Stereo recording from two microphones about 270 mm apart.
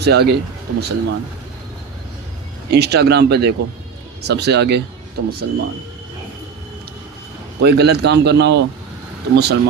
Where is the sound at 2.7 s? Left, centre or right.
Right.